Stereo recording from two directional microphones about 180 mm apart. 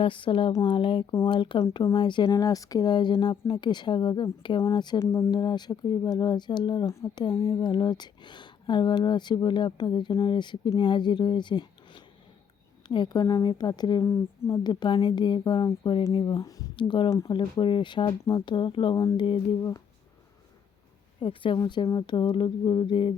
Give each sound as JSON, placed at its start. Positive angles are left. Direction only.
{"t": 0.0, "sound": "speech", "side_deg": 30}
{"t": 21.2, "sound": "speech", "side_deg": 30}